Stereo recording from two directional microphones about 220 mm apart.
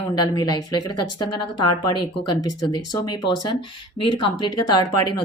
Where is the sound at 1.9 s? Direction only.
20° left (ahead or behind).